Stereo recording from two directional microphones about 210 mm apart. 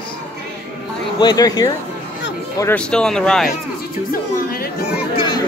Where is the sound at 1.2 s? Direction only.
20° left (ahead or behind).